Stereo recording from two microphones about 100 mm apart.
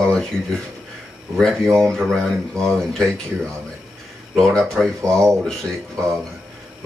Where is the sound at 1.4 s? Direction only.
5° left (ahead or behind).